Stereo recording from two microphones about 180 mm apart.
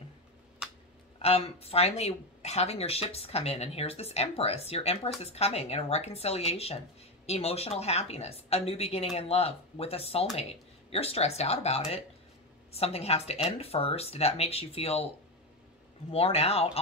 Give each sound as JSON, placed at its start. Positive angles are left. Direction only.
{"t": 1.2, "sound": "speech", "side_deg": 35}
{"t": 16.1, "sound": "speech", "side_deg": 35}